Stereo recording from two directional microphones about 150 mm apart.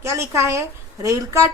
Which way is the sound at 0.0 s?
20° right (ahead or behind).